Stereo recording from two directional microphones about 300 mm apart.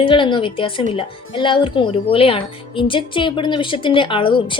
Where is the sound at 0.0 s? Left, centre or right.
Centre.